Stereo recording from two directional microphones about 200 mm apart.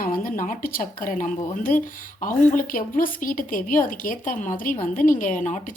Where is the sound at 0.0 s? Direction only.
45° left (ahead or behind).